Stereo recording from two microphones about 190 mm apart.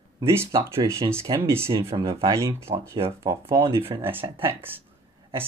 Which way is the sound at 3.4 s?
15° right (ahead or behind).